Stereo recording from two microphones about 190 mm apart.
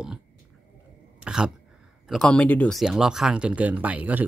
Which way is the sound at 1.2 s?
5° right (ahead or behind).